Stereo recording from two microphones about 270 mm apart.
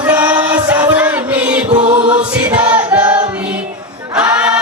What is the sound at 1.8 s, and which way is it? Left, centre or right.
Music, centre.